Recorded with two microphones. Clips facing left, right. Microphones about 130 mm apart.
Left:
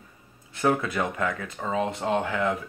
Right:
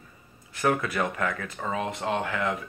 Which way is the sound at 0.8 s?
25° left (ahead or behind).